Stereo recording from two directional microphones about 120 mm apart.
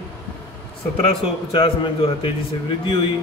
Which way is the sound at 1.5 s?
50° left (ahead or behind).